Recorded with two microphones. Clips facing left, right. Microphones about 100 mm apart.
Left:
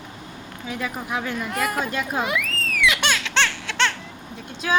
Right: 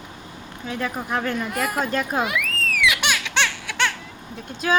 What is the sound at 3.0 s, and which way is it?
Baby laughter, 15° right (ahead or behind).